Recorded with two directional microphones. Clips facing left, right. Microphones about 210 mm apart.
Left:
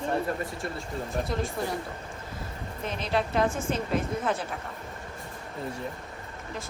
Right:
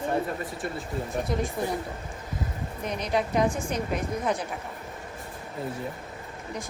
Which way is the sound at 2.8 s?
15° right (ahead or behind).